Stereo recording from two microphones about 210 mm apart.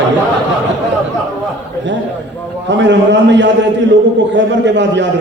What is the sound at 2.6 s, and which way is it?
A man's voice, 60° right (ahead or behind).